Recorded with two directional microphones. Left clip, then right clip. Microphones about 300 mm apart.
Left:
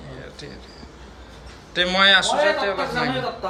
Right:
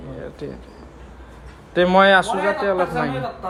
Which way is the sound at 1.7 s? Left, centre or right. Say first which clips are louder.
Right 3 dB; centre.